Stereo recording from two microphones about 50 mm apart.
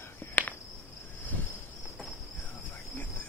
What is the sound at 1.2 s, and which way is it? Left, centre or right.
Cricket, left.